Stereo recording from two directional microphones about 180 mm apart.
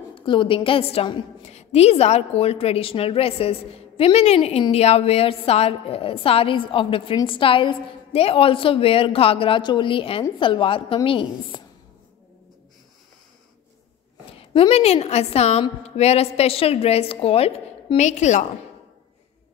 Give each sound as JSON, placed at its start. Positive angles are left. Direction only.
{"t": 0.1, "sound": "a woman's voice", "side_deg": 25}
{"t": 14.5, "sound": "a woman's voice", "side_deg": 30}